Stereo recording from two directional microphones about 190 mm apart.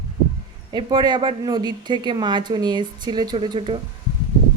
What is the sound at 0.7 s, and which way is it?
A woman's voice, 25° right (ahead or behind).